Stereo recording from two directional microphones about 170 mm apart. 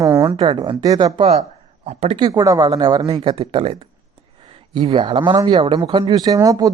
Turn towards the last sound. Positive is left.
turn(degrees=-20)  # may be behind; listen again after turning